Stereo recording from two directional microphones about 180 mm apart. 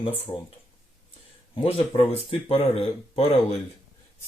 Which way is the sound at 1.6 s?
35° left (ahead or behind).